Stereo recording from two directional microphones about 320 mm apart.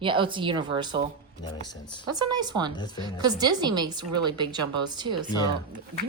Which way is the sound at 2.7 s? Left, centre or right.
Centre.